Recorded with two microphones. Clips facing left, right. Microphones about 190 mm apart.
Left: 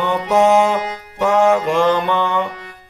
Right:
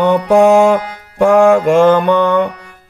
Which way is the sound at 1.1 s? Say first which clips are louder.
Right 6 dB; 50° right (ahead or behind).